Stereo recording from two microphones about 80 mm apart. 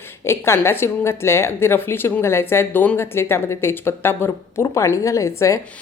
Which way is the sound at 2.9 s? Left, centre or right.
Left.